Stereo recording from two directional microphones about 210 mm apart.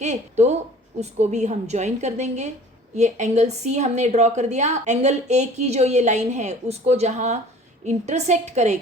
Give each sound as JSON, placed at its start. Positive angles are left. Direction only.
{"t": 0.0, "sound": "a woman's voice", "side_deg": -35}